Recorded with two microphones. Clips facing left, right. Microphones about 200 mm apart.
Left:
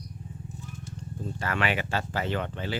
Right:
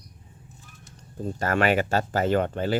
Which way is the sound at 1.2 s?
45° right (ahead or behind).